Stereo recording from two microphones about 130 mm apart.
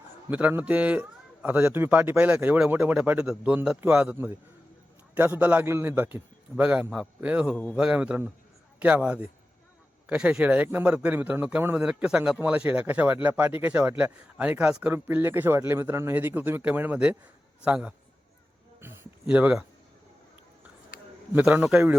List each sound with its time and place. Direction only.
0.3 s speech: 10° right (ahead or behind)
7.5 s speech: 10° left (ahead or behind)
7.8 s speech: 5° right (ahead or behind)
19.2 s speech: 10° right (ahead or behind)
20.9 s bee: 90° left
21.3 s speech: 10° right (ahead or behind)